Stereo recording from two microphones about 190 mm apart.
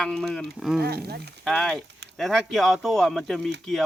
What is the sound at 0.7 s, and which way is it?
Speech, 55° right (ahead or behind).